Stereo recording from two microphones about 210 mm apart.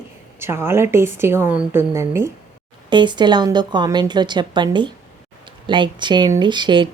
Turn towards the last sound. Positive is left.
turn(degrees=-20)  # may be behind; listen again after turning